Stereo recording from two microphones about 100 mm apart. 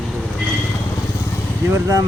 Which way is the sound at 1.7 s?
35° right (ahead or behind).